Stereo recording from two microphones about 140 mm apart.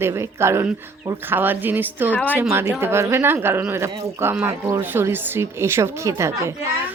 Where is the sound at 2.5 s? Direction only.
15° right (ahead or behind).